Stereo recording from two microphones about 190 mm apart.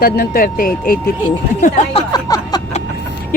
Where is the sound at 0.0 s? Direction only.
50° left (ahead or behind).